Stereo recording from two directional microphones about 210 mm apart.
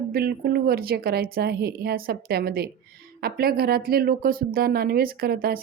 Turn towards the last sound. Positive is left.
turn(degrees=-45)  # may be behind; listen again after turning